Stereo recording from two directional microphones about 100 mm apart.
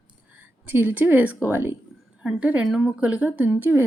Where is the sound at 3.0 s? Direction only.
15° right (ahead or behind).